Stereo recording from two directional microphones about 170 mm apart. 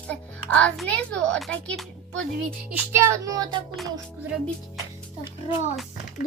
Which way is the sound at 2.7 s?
15° right (ahead or behind).